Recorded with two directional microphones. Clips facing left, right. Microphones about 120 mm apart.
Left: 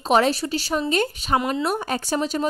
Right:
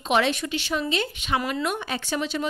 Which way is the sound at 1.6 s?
40° left (ahead or behind).